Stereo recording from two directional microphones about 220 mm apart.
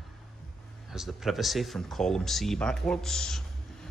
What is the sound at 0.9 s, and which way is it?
Speech, centre (ahead or behind).